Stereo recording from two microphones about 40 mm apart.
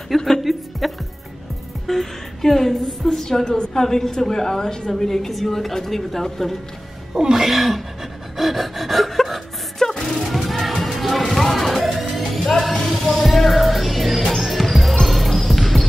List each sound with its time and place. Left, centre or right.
0.4 s music: centre
1.9 s a woman's voice: centre
7.2 s a sound: centre
7.4 s pant: centre
10.2 s music: centre
14.3 s basketball bounce: centre